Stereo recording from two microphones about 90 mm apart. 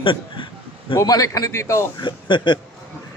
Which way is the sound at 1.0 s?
40° left (ahead or behind).